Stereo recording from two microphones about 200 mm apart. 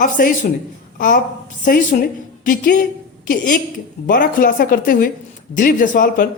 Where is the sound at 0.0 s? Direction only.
40° left (ahead or behind).